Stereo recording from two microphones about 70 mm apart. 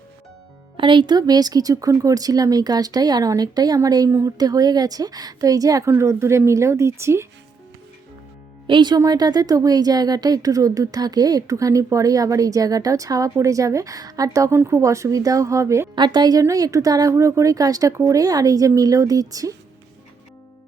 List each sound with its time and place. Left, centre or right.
1.0 s a woman's voice: right
4.1 s speech: right
4.4 s speech: right
5.9 s speech: right
9.0 s speech: right
14.5 s speech: right
16.0 s a woman's voice: right
16.4 s speech: right